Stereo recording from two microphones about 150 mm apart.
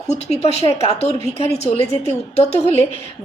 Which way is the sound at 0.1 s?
45° left (ahead or behind).